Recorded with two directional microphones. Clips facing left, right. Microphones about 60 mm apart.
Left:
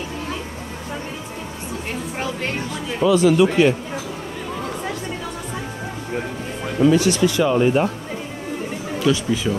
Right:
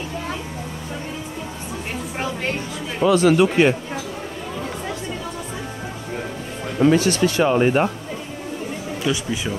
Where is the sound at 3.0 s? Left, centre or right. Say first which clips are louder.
Even; right.